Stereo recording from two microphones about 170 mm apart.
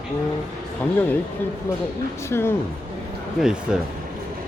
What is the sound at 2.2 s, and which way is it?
Speech, 15° left (ahead or behind).